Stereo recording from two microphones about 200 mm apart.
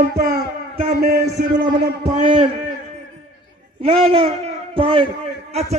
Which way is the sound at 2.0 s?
35° right (ahead or behind).